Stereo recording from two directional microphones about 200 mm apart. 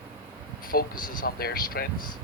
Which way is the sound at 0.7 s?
45° left (ahead or behind).